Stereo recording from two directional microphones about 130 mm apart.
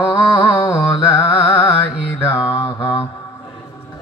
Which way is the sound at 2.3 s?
25° left (ahead or behind).